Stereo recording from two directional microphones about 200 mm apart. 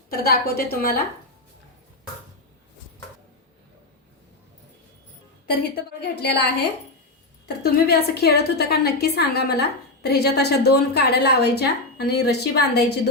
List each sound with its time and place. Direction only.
0.1 s a woman's voice: 50° left (ahead or behind)
5.7 s a woman's voice: 55° left (ahead or behind)
7.4 s a woman's voice: 55° left (ahead or behind)